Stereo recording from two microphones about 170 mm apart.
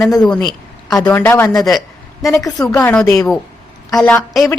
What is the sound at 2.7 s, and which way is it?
Speech, 15° left (ahead or behind).